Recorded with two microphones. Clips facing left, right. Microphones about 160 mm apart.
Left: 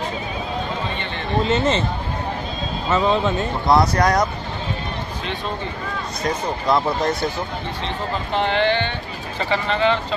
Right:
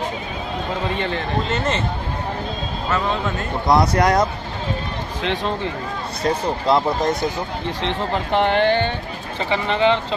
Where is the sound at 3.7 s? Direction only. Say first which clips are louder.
Right 1 dB; 20° right (ahead or behind).